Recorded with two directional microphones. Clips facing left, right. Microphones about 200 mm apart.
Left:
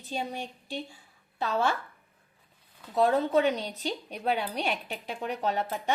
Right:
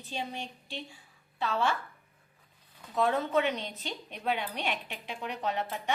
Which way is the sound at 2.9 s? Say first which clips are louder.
Left 4 dB; 35° left (ahead or behind).